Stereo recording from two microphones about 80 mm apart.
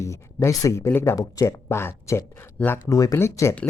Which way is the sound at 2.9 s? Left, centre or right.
Left.